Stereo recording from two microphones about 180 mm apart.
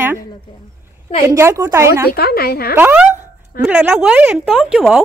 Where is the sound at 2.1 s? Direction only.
55° left (ahead or behind).